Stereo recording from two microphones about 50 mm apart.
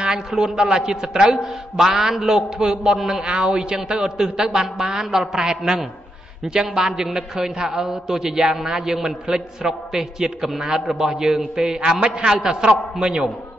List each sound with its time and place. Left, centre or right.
0.3 s a man's voice: centre